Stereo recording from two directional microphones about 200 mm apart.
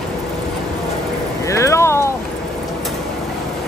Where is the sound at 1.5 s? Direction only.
15° left (ahead or behind).